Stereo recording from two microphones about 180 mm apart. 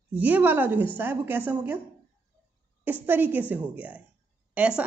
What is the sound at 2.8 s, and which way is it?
A woman's voice, 10° right (ahead or behind).